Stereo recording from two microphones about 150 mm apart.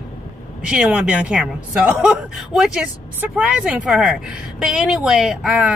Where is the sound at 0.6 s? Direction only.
5° right (ahead or behind).